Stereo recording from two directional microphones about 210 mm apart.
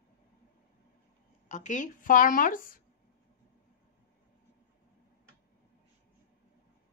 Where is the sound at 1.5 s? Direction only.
35° left (ahead or behind).